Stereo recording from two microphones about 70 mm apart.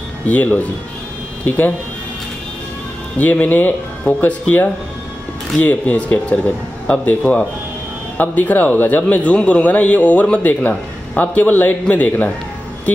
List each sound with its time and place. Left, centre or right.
0.3 s a man's voice: left
3.2 s a man's voice: left